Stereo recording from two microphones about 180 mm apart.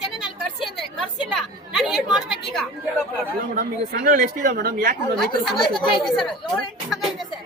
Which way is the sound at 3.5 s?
55° right (ahead or behind).